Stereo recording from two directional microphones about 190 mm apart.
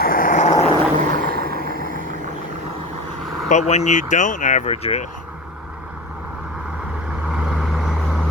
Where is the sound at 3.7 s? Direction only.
40° left (ahead or behind).